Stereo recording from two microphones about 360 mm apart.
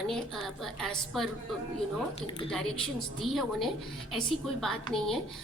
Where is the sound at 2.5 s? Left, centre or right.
Centre.